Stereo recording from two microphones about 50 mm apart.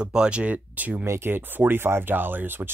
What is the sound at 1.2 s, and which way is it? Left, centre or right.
Speech, right.